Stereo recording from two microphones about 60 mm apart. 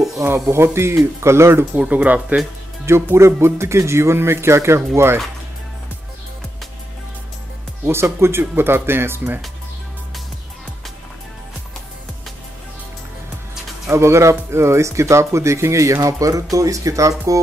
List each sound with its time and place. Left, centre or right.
0.2 s speech: right
1.8 s speech: right
2.8 s speech: right
7.8 s speech: right
13.8 s speech: right